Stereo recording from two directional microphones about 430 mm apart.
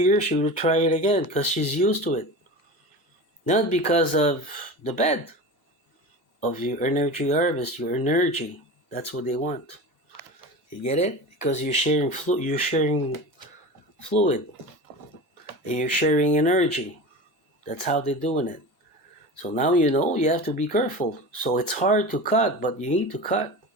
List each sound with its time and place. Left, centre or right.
0.0 s speech: centre
3.5 s speech: centre
6.4 s speech: centre
10.8 s speech: centre
14.1 s speech: centre
15.6 s speech: centre